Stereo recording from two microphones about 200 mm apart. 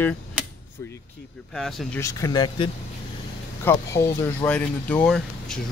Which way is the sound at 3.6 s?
10° left (ahead or behind).